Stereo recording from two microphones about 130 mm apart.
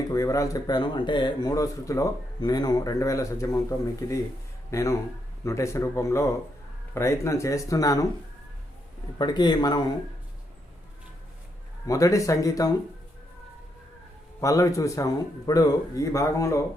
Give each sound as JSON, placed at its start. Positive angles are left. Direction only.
{"t": 0.1, "sound": "speech", "side_deg": 25}
{"t": 9.1, "sound": "a man's voice", "side_deg": 35}
{"t": 11.9, "sound": "speech", "side_deg": 25}
{"t": 14.4, "sound": "speech", "side_deg": 25}